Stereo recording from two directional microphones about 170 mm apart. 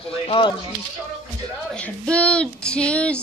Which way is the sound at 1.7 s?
5° left (ahead or behind).